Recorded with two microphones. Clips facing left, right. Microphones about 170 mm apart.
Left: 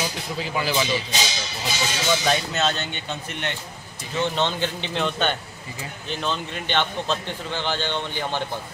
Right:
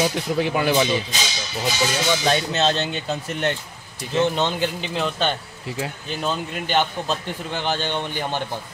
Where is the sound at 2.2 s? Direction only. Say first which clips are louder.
Right 3 dB; 30° right (ahead or behind).